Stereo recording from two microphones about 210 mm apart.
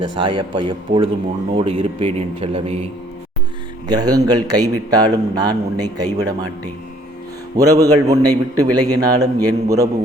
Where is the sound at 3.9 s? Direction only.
20° right (ahead or behind).